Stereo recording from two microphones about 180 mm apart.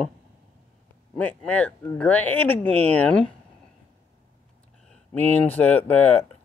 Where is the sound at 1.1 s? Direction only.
10° left (ahead or behind).